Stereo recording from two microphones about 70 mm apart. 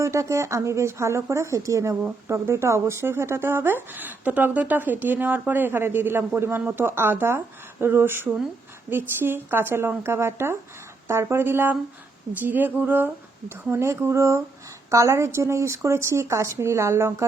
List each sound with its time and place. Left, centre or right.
0.0 s speech: right
2.2 s speech: right
12.5 s a sound: right
13.7 s speech: right